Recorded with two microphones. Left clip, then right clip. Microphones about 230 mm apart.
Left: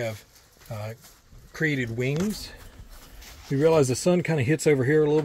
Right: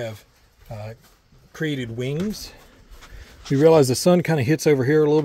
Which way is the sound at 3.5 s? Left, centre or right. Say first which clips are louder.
Right 6 dB; right.